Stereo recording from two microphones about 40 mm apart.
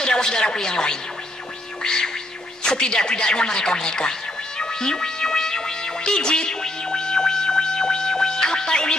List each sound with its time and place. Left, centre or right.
0.0 s speech: centre
1.8 s music: centre
2.6 s speech: centre
4.6 s music: centre